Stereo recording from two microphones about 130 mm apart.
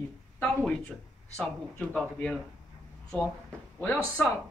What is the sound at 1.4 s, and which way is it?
Speech, 10° left (ahead or behind).